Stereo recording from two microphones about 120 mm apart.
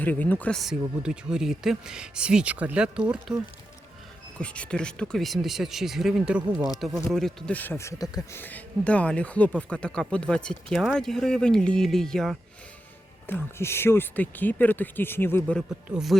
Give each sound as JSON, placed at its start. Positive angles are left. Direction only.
{"t": 0.0, "sound": "speech", "side_deg": 15}
{"t": 0.6, "sound": "speech", "side_deg": -5}
{"t": 4.4, "sound": "speech", "side_deg": 10}
{"t": 8.4, "sound": "speech", "side_deg": 15}
{"t": 13.2, "sound": "speech", "side_deg": 20}